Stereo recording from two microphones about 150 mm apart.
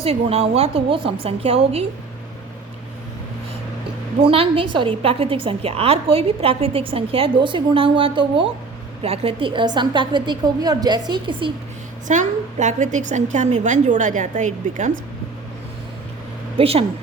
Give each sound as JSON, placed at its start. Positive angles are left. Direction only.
{"t": 0.0, "sound": "a woman's voice", "side_deg": -40}
{"t": 4.2, "sound": "a woman's voice", "side_deg": -40}
{"t": 12.0, "sound": "a woman's voice", "side_deg": -55}
{"t": 16.6, "sound": "a woman's voice", "side_deg": -40}